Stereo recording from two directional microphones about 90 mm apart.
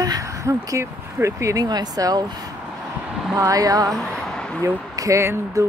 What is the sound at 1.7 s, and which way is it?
Speech, 45° right (ahead or behind).